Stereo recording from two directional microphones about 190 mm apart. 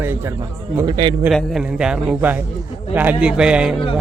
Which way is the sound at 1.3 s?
Centre (ahead or behind).